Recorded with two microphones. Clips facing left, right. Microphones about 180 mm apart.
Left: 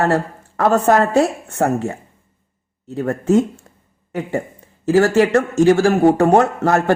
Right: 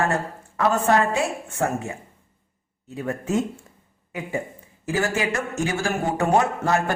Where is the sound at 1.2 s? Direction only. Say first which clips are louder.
Left 8 dB; 70° left (ahead or behind).